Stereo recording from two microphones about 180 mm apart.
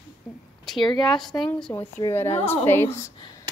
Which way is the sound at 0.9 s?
Centre (ahead or behind).